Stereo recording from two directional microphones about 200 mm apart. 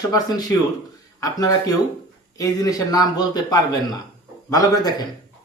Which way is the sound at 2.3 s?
15° left (ahead or behind).